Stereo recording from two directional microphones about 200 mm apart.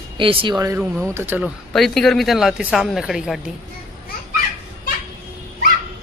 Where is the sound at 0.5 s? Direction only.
15° right (ahead or behind).